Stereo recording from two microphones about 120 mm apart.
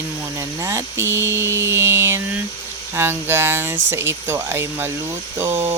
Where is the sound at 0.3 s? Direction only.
25° right (ahead or behind).